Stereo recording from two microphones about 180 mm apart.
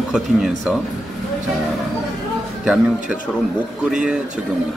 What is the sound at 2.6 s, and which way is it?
Speech, 5° right (ahead or behind).